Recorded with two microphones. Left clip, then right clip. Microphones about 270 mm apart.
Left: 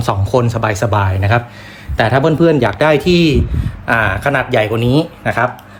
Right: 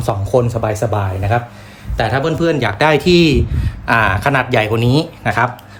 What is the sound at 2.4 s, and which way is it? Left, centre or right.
Speech, centre.